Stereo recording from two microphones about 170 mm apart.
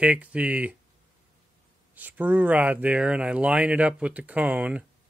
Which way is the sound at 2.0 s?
10° right (ahead or behind).